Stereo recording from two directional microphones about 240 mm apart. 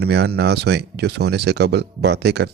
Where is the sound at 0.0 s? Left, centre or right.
Right.